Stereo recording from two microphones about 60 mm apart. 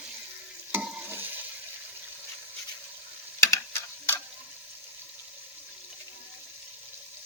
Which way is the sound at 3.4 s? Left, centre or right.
Left.